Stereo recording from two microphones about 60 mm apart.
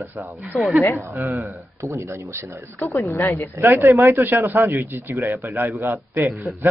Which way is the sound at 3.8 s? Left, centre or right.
Right.